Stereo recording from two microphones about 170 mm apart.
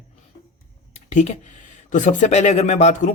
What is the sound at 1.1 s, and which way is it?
Speech, 45° left (ahead or behind).